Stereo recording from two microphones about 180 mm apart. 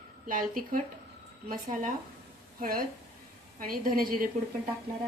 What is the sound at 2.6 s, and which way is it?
Speech, 55° right (ahead or behind).